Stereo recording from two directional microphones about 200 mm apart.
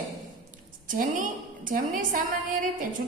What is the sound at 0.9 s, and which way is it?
A woman's voice, 45° right (ahead or behind).